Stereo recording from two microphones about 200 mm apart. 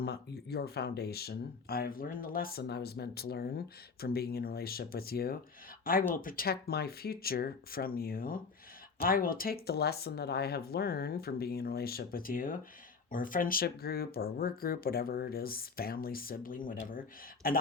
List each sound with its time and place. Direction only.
0.0 s speech: 55° left (ahead or behind)